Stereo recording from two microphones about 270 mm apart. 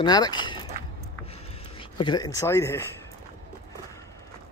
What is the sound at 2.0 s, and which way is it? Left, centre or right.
Speech, centre.